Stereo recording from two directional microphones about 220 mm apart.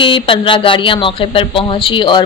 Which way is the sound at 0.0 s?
20° left (ahead or behind).